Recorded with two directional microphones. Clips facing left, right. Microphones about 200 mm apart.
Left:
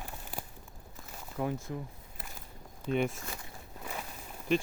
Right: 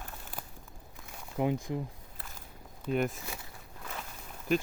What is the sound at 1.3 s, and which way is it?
Speech, 15° right (ahead or behind).